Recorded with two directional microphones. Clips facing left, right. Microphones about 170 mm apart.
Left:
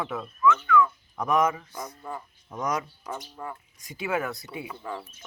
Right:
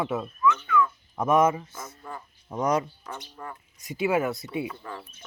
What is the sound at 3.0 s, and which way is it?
Speech, 10° left (ahead or behind).